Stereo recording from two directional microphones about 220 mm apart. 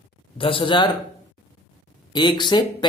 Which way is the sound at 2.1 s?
20° left (ahead or behind).